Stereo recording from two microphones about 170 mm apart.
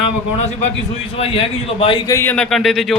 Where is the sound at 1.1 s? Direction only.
35° left (ahead or behind).